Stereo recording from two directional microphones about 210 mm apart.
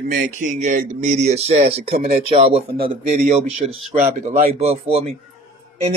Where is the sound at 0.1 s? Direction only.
40° right (ahead or behind).